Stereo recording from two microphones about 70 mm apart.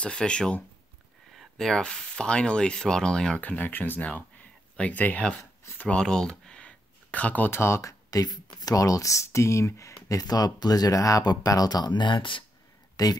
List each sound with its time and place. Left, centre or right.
0.0 s speech: centre
1.3 s speech: centre; by 5.2 s left
5.9 s a sound: centre
7.5 s speech: left
8.1 s speech: left
10.2 s speech: left
13.0 s speech: left